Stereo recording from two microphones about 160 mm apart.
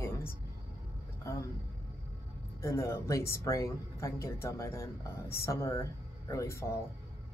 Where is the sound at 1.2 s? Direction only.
20° left (ahead or behind).